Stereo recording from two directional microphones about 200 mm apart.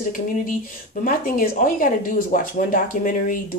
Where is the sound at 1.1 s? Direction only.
45° left (ahead or behind).